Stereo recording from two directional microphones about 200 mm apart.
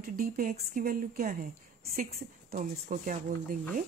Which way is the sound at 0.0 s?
45° right (ahead or behind).